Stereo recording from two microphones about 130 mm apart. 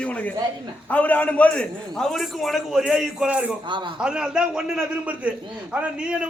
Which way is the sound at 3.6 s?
35° right (ahead or behind).